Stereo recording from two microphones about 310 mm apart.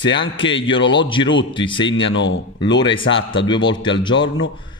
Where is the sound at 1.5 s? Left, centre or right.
Centre.